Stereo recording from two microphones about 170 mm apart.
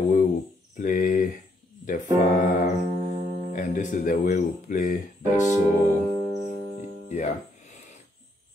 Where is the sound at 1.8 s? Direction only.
50° left (ahead or behind).